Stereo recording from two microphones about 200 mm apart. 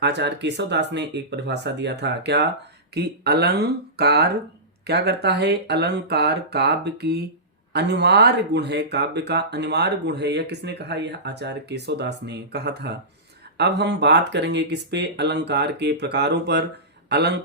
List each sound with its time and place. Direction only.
0.0 s speech: 60° right (ahead or behind)